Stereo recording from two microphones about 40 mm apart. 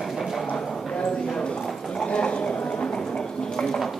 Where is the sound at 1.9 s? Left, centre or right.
Left.